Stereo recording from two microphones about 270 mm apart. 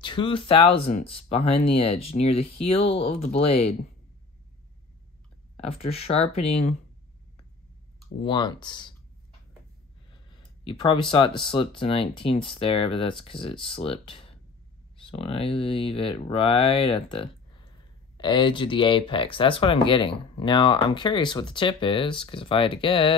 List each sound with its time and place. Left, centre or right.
0.0 s speech: centre
5.6 s speech: left
8.2 s speech: centre
10.6 s speech: centre